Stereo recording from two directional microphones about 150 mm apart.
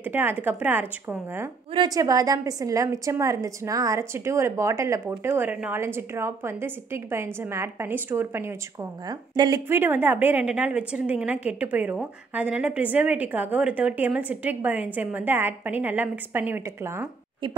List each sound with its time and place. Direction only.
0.0 s a woman's voice: 15° right (ahead or behind)
1.7 s a woman's voice: 25° right (ahead or behind)
9.7 s a woman's voice: 15° right (ahead or behind)